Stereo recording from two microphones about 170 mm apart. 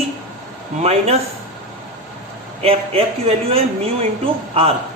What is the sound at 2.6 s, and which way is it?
A man's voice, 35° right (ahead or behind).